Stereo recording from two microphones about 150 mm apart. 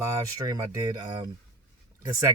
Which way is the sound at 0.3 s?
25° right (ahead or behind).